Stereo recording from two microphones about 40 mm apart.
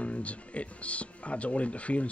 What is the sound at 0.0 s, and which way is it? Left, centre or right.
Speech, left.